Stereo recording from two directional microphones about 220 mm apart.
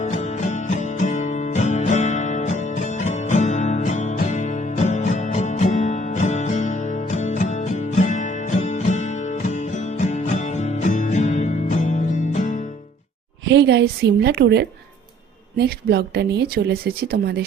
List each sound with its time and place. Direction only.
0.0 s music: 35° left (ahead or behind)
13.4 s a woman's voice: 50° right (ahead or behind)